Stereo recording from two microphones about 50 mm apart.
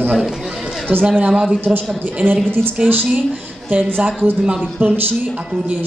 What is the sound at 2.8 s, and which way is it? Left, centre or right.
A man's voice, right.